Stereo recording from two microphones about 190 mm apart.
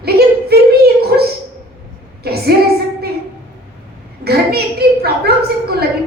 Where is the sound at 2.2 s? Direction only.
55° right (ahead or behind).